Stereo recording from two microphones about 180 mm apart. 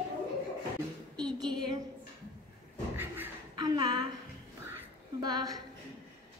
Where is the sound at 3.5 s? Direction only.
25° right (ahead or behind).